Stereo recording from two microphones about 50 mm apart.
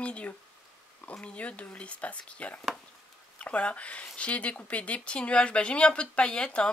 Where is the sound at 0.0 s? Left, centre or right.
Left.